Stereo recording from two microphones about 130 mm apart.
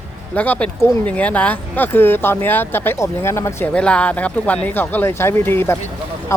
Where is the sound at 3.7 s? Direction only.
10° left (ahead or behind).